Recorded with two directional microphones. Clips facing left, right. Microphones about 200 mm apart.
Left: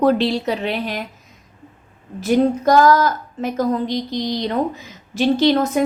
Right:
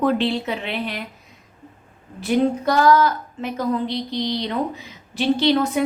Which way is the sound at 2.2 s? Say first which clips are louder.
Left 3 dB; 45° left (ahead or behind).